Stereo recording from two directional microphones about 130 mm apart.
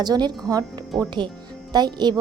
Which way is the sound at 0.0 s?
35° right (ahead or behind).